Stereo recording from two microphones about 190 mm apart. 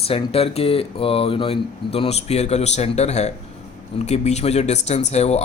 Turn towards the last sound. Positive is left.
turn(degrees=35)  # may be behind; listen again after turning